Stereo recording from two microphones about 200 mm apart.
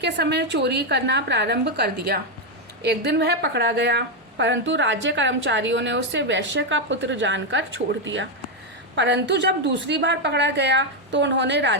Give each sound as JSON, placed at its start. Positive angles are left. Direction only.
{"t": 0.0, "sound": "a woman's voice", "side_deg": -55}